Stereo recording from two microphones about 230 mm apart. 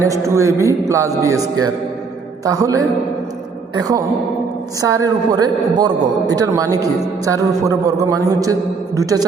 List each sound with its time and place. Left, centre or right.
0.0 s a man's voice: centre
2.4 s a man's voice: centre